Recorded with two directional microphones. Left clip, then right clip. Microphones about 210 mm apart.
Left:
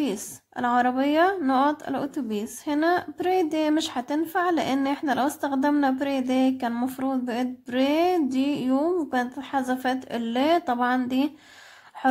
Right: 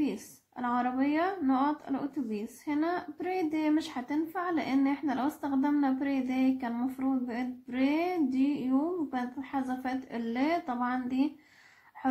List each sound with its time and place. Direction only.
0.0 s speech: 45° left (ahead or behind)